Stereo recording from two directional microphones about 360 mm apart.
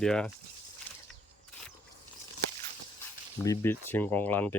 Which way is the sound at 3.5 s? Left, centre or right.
Centre.